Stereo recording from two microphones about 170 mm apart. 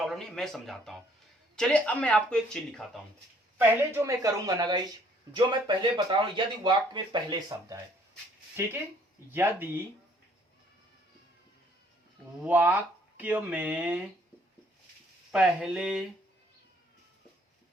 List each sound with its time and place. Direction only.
0.0 s speech: centre (ahead or behind)
3.8 s speech: 15° right (ahead or behind)
12.5 s speech: 10° right (ahead or behind)
15.3 s speech: 5° right (ahead or behind)